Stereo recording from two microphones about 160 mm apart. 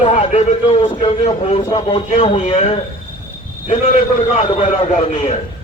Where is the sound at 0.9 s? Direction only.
40° left (ahead or behind).